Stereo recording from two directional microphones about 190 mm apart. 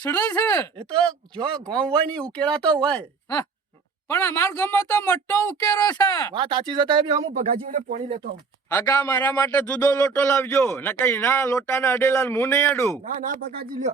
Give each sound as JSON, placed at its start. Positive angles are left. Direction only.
{"t": 0.0, "sound": "a man's voice", "side_deg": 10}
{"t": 1.8, "sound": "a man's voice", "side_deg": 5}
{"t": 6.3, "sound": "speech", "side_deg": -25}
{"t": 7.3, "sound": "speech", "side_deg": -45}
{"t": 8.7, "sound": "a man's voice", "side_deg": 15}
{"t": 13.1, "sound": "speech", "side_deg": -45}